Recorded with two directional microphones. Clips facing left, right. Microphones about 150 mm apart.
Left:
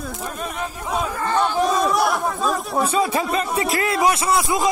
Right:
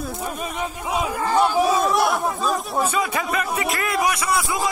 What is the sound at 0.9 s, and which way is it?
Speech, 10° right (ahead or behind).